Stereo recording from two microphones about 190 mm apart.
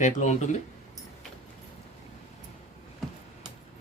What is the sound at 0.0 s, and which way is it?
Speech, 40° left (ahead or behind).